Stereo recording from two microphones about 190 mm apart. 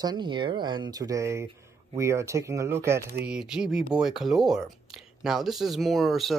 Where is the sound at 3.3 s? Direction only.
5° right (ahead or behind).